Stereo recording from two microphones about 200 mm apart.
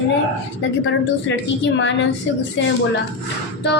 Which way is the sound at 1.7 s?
65° left (ahead or behind).